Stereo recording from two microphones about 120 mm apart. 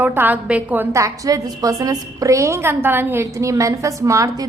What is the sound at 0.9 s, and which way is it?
A woman's voice, 25° right (ahead or behind).